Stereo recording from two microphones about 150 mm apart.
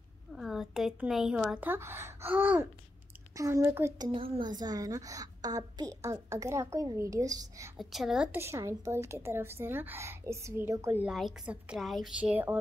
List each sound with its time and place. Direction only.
0.4 s a woman's voice: centre (ahead or behind); by 4.1 s 20° right (ahead or behind)
4.1 s a woman's voice: 30° right (ahead or behind)
7.7 s a woman's voice: centre (ahead or behind)
8.4 s a woman's voice: 15° right (ahead or behind)
11.1 s a woman's voice: 5° right (ahead or behind)